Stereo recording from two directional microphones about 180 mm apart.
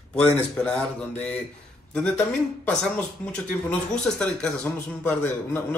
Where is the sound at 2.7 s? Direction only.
5° left (ahead or behind).